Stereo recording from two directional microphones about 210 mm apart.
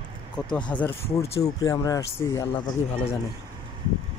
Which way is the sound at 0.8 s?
10° left (ahead or behind).